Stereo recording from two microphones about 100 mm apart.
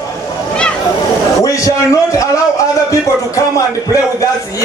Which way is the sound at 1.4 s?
35° left (ahead or behind).